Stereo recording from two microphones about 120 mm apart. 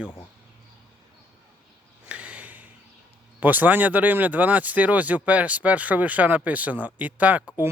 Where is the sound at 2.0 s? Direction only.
10° right (ahead or behind).